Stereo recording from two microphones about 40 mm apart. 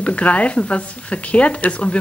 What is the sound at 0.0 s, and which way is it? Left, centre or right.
Speech, left.